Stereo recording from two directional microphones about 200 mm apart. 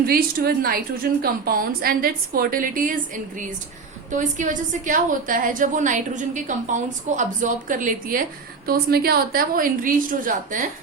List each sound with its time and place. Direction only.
0.0 s a woman's voice: 50° right (ahead or behind)